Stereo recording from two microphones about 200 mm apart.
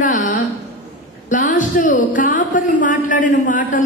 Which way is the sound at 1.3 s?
40° left (ahead or behind).